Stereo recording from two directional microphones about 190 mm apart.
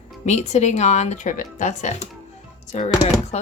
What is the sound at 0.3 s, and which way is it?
A woman's voice, 35° left (ahead or behind).